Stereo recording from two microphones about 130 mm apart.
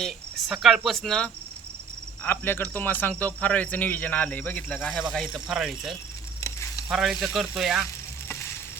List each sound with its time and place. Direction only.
0.0 s speech: centre (ahead or behind)
0.9 s frying: 5° left (ahead or behind)
2.2 s speech: 15° left (ahead or behind)
5.1 s frying: 5° left (ahead or behind)
6.4 s frying: 25° left (ahead or behind)
6.8 s frying: centre (ahead or behind)
8.3 s sizzle: 20° left (ahead or behind)